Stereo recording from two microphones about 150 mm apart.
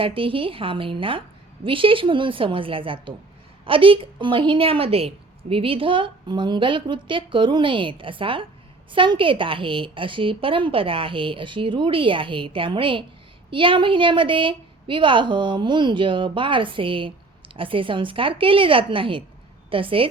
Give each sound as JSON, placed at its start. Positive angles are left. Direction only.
{"t": 0.0, "sound": "a woman's voice", "side_deg": -35}